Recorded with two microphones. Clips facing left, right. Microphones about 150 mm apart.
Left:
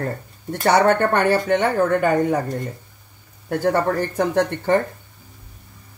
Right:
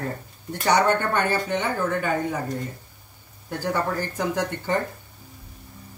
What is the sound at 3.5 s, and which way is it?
Speech, 60° left (ahead or behind).